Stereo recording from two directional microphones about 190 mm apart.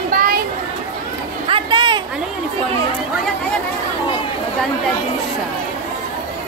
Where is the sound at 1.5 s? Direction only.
25° right (ahead or behind).